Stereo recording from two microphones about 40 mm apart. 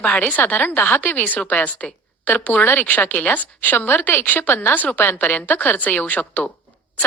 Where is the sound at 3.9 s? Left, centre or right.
Left.